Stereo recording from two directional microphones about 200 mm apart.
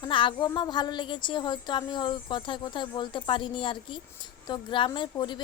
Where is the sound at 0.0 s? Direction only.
25° left (ahead or behind).